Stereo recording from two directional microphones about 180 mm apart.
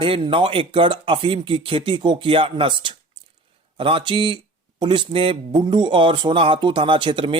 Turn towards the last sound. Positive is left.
turn(degrees=-30)  # may be behind; listen again after turning